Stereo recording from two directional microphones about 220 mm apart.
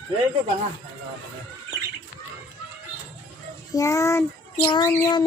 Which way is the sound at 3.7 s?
15° left (ahead or behind).